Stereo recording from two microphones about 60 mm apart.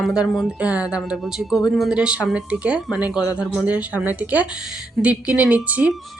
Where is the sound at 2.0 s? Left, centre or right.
Centre.